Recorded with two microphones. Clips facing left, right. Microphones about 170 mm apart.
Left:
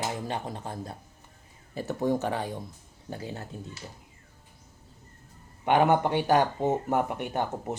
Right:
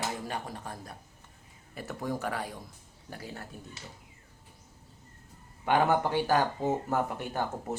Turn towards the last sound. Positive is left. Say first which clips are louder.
# left 3 dB
turn(degrees=20)  # may be behind; listen again after turning